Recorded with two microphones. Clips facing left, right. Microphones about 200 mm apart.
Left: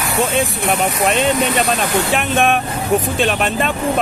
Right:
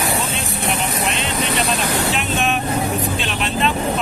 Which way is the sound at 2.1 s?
55° left (ahead or behind).